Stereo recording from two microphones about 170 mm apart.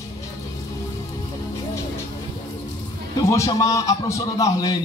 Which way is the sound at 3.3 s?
20° left (ahead or behind).